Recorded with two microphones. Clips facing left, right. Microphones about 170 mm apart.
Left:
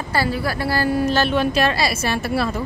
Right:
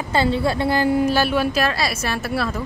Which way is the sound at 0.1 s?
25° right (ahead or behind).